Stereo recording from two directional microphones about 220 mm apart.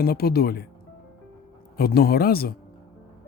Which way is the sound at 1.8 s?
45° left (ahead or behind).